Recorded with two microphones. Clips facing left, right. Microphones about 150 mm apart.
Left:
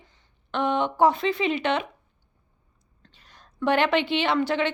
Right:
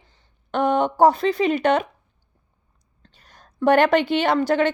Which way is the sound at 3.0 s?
40° right (ahead or behind).